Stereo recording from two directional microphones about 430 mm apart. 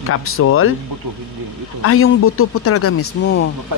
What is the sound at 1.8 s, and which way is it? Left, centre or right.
Speech, left.